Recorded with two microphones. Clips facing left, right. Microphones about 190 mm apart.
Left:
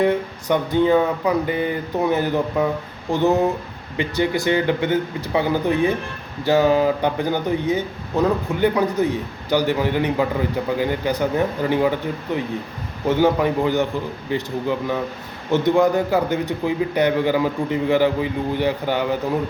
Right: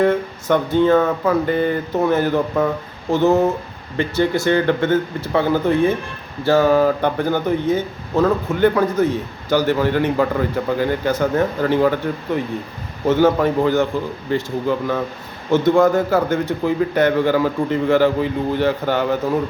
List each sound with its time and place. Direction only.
0.0 s speech: 15° left (ahead or behind)
13.1 s speech: 15° left (ahead or behind)